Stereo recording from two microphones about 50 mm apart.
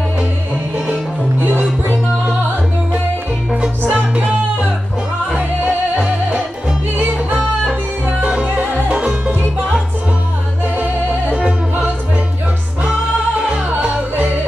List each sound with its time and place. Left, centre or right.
3.9 s music: right
7.0 s music: right
8.2 s music: right
8.5 s music: right
10.8 s music: right
13.5 s music: right